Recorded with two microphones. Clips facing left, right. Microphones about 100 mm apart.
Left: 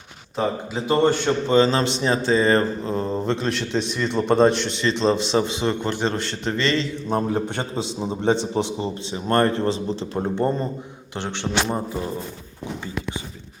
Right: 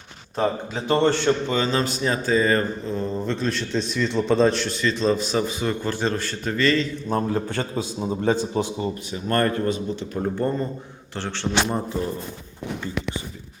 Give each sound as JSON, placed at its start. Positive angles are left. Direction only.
{"t": 0.3, "sound": "a man's voice", "side_deg": 5}
{"t": 1.5, "sound": "a man's voice", "side_deg": 30}
{"t": 3.8, "sound": "a man's voice", "side_deg": 60}
{"t": 4.4, "sound": "a man's voice", "side_deg": 25}